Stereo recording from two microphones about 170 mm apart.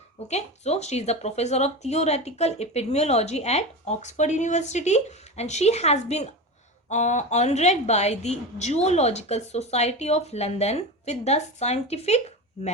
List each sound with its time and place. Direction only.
0.3 s speech: 40° left (ahead or behind)